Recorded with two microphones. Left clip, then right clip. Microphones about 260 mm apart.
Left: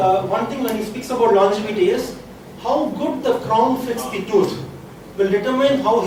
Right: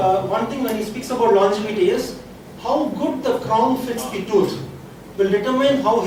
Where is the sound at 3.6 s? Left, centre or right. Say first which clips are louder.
Left 1 dB; left.